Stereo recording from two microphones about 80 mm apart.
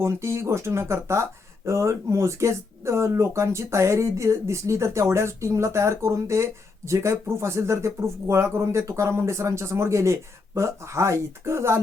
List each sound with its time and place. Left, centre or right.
0.0 s speech: right